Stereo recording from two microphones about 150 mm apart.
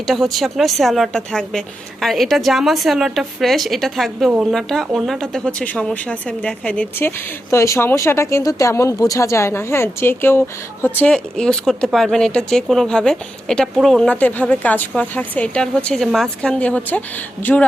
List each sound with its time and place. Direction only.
0.1 s speech: centre (ahead or behind)
7.5 s speech: 20° left (ahead or behind)